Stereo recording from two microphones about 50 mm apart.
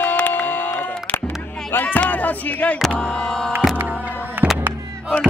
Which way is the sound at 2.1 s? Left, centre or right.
Left.